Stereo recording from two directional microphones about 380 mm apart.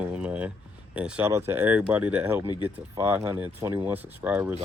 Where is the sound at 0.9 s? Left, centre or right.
Centre.